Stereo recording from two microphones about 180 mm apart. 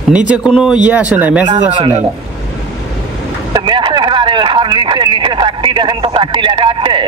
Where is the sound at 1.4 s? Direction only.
30° right (ahead or behind).